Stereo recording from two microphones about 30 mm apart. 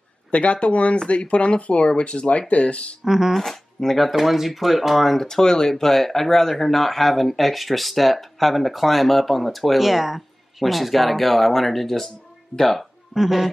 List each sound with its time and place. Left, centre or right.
0.3 s speech: left
3.1 s speech: centre
3.3 s speech: centre
4.1 s speech: centre
5.1 s speech: centre
13.1 s speech: centre